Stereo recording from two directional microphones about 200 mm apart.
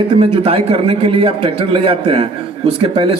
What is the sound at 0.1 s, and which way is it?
A man's voice, 30° right (ahead or behind).